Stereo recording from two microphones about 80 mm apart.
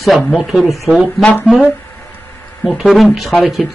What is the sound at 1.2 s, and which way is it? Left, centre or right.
Speech, centre.